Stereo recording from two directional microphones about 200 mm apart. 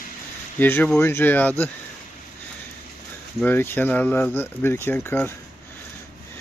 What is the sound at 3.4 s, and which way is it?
Speech, 10° left (ahead or behind).